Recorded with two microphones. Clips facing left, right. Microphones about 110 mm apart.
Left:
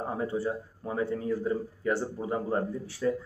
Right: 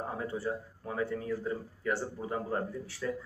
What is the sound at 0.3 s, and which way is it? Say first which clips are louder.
A man's voice: left 4 dB; 20° left (ahead or behind).